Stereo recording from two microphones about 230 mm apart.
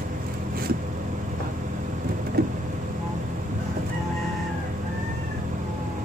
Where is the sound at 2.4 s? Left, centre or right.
Right.